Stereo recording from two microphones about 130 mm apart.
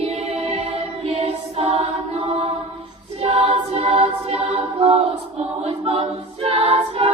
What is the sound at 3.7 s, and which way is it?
Music, 55° right (ahead or behind).